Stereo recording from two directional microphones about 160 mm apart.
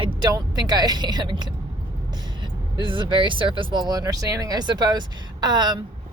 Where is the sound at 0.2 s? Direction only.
25° right (ahead or behind).